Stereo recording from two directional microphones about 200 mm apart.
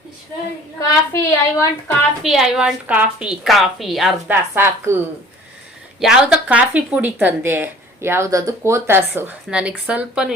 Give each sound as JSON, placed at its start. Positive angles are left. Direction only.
{"t": 0.8, "sound": "a woman's voice", "side_deg": 15}
{"t": 2.2, "sound": "a woman's voice", "side_deg": 0}
{"t": 4.5, "sound": "speech", "side_deg": -10}
{"t": 6.0, "sound": "speech", "side_deg": -5}